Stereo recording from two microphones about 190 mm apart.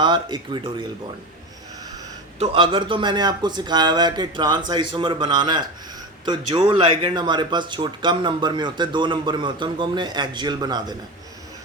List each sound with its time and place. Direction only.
0.0 s speech: 25° right (ahead or behind)
2.4 s speech: 30° right (ahead or behind)